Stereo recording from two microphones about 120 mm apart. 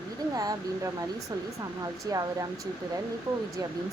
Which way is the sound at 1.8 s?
30° right (ahead or behind).